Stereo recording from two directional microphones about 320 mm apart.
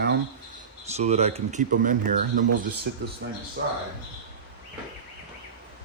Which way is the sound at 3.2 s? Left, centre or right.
Right.